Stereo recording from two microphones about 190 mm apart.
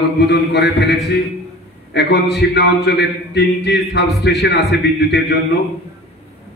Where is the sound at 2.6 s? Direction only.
65° left (ahead or behind).